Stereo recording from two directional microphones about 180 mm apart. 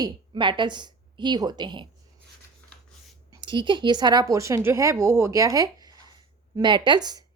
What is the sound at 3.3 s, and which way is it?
A woman's voice, 25° right (ahead or behind).